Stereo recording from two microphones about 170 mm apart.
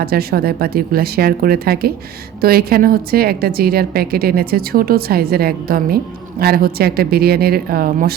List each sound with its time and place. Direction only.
0.0 s a woman's voice: 65° right (ahead or behind)